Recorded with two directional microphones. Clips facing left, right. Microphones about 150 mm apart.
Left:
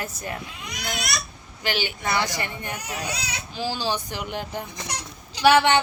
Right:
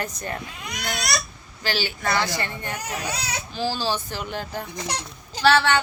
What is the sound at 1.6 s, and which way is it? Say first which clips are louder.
A woman's voice: right 1 dB; 20° left (ahead or behind).